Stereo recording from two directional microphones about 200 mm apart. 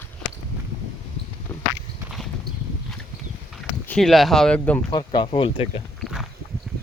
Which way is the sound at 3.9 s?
Centre (ahead or behind).